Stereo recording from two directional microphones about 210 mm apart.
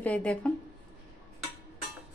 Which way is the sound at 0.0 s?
5° left (ahead or behind).